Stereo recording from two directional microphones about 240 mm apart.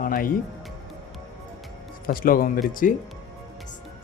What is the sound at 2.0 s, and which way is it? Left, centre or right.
Speech, left.